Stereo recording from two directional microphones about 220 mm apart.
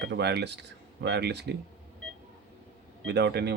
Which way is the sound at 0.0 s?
50° right (ahead or behind).